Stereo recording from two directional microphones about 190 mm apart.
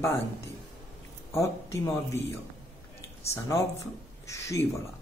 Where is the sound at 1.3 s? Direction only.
15° left (ahead or behind).